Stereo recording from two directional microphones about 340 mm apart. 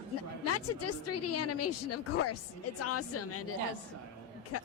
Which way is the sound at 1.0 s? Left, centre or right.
Left.